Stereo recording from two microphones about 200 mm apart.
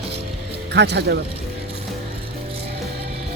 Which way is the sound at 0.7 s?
55° right (ahead or behind).